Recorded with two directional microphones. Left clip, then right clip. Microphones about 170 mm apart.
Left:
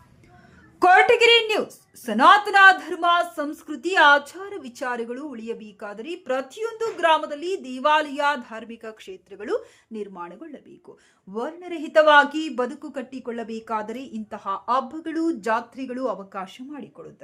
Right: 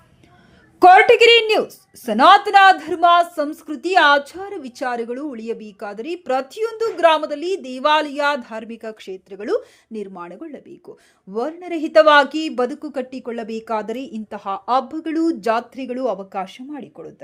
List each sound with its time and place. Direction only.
0.8 s a woman's voice: 20° right (ahead or behind)